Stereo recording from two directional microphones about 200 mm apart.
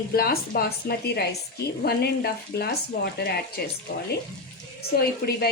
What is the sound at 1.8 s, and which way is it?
A woman's voice, 50° left (ahead or behind).